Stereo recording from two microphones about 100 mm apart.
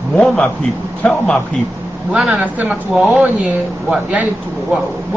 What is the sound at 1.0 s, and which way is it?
Speech, 15° left (ahead or behind).